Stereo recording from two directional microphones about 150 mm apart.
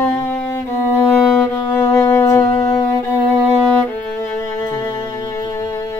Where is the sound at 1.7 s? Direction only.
15° left (ahead or behind).